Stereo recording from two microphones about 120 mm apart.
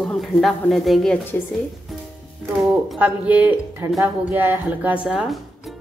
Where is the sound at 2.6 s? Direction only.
Centre (ahead or behind).